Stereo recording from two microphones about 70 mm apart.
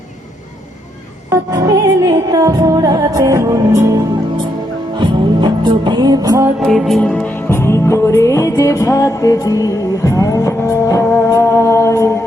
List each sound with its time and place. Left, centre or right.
1.5 s music: right
4.9 s music: right
6.6 s music: centre
7.0 s music: centre
7.3 s music: left
11.3 s mantra: left